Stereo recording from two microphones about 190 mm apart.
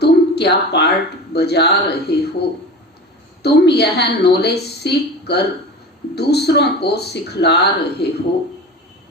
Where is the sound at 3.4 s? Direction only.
60° left (ahead or behind).